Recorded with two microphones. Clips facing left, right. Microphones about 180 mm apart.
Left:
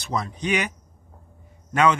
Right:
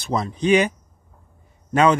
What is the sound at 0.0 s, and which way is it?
Speech, 30° right (ahead or behind).